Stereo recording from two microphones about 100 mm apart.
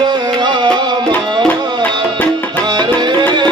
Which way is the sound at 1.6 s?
45° right (ahead or behind).